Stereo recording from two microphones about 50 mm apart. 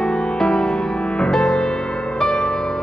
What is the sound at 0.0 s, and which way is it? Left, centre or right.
Music, centre.